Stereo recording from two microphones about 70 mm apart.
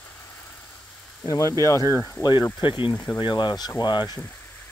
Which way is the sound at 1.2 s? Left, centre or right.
Left.